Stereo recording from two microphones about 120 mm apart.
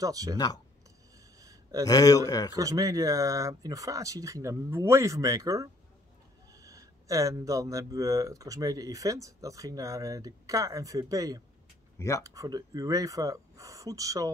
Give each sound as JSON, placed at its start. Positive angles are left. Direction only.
{"t": 0.0, "sound": "speech", "side_deg": -30}
{"t": 1.4, "sound": "a sound", "side_deg": -30}
{"t": 1.9, "sound": "speech", "side_deg": 30}
{"t": 2.5, "sound": "speech", "side_deg": -30}